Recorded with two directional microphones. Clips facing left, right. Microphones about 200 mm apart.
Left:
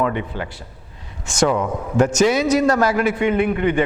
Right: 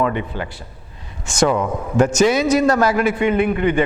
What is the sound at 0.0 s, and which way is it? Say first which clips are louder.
A man's voice: right 1 dB; 15° right (ahead or behind).